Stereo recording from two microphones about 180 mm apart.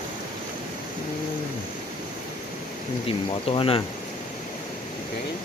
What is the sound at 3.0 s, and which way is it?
Speech, 30° left (ahead or behind).